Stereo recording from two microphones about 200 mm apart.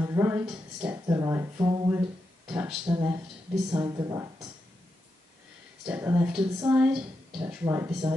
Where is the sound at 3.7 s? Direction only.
20° right (ahead or behind).